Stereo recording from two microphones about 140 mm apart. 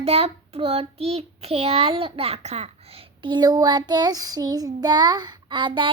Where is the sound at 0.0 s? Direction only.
45° right (ahead or behind).